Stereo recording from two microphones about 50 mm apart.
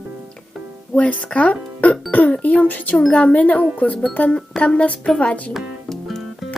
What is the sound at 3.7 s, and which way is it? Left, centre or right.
Speech, left.